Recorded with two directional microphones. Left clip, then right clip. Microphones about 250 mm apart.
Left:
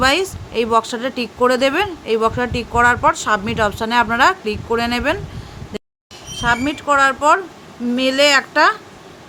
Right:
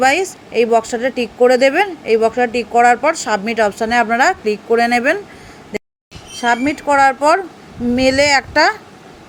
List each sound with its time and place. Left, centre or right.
0.0 s a woman's voice: centre
6.4 s speech: centre